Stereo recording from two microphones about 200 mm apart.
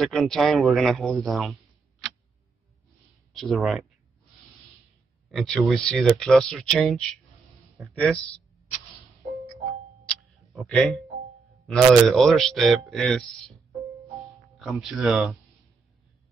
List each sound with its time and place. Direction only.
0.0 s speech: centre (ahead or behind)
3.3 s speech: centre (ahead or behind)
5.3 s speech: centre (ahead or behind)
10.0 s tick: centre (ahead or behind)
11.6 s speech: centre (ahead or behind)
14.6 s speech: centre (ahead or behind)